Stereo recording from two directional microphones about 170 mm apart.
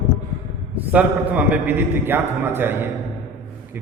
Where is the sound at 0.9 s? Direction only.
10° right (ahead or behind).